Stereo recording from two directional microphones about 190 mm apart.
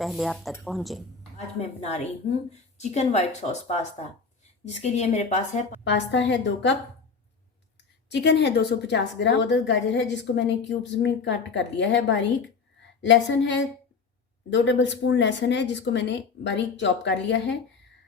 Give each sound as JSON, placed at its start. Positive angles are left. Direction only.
{"t": 0.0, "sound": "speech", "side_deg": 0}
{"t": 1.5, "sound": "a woman's voice", "side_deg": 35}
{"t": 5.8, "sound": "speech", "side_deg": 65}
{"t": 8.1, "sound": "speech", "side_deg": 65}